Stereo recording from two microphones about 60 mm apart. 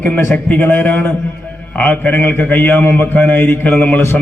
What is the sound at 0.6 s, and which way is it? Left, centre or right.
A man's voice, left.